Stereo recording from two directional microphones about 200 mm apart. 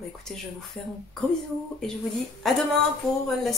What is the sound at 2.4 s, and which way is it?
Speech, centre (ahead or behind).